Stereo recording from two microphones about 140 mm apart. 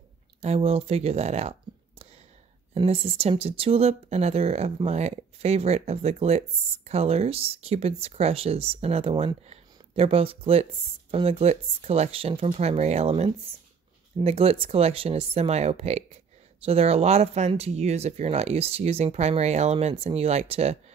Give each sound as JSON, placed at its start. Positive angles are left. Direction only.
{"t": 0.4, "sound": "speech", "side_deg": -45}
{"t": 2.7, "sound": "speech", "side_deg": -45}